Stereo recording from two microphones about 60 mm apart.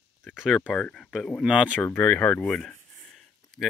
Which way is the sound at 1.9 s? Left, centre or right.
Left.